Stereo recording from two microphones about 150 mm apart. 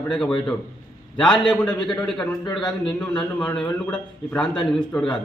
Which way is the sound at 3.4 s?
10° left (ahead or behind).